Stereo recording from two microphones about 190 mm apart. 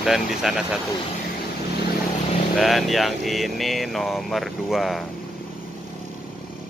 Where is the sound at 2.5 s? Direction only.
Centre (ahead or behind).